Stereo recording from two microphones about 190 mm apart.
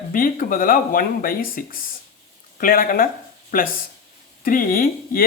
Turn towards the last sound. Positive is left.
turn(degrees=50)  # may be behind; listen again after turning